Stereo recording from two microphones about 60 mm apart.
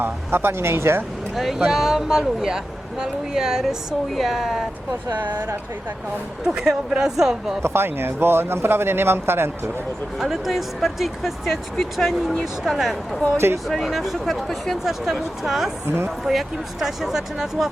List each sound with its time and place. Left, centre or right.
0.0 s speech: right
1.4 s speech: centre
5.1 s speech: right
6.4 s speech: centre
7.6 s speech: right
10.2 s speech: centre
13.3 s speech: right
13.7 s speech: centre